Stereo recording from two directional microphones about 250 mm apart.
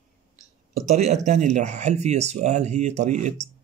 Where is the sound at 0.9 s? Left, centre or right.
Right.